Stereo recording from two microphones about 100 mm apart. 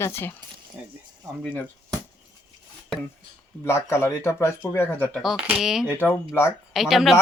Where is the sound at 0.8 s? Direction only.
15° right (ahead or behind).